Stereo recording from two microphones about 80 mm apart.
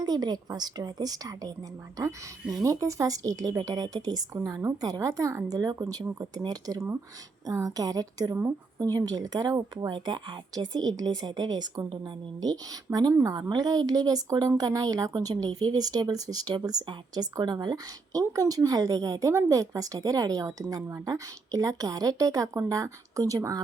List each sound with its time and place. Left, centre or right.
0.0 s a woman's voice: right
9.9 s speech: right
13.3 s a woman's voice: right
16.8 s speech: right
18.3 s a woman's voice: right